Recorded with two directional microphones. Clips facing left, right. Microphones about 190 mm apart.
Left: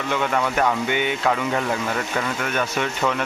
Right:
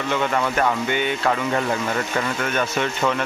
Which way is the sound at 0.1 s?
5° left (ahead or behind).